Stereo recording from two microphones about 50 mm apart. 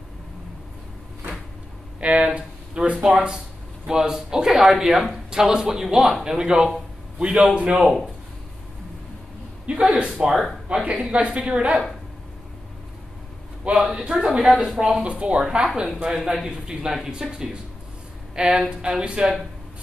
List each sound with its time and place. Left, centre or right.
2.0 s a sound: right
2.3 s speech: right
9.7 s a man's voice: right
10.1 s a woman's voice: centre
13.8 s speech: centre
15.0 s a woman's voice: right